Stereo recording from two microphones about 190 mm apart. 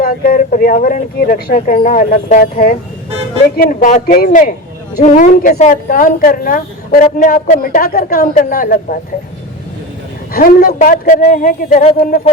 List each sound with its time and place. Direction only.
0.0 s speech: 50° left (ahead or behind)
10.3 s speech: 50° left (ahead or behind)